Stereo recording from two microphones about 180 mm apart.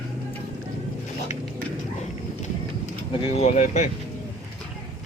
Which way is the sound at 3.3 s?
40° left (ahead or behind).